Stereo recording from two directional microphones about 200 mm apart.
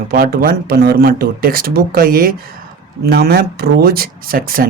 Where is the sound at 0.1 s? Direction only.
50° right (ahead or behind).